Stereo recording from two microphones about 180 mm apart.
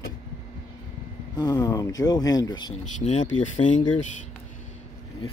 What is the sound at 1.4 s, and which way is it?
Speech, 20° left (ahead or behind).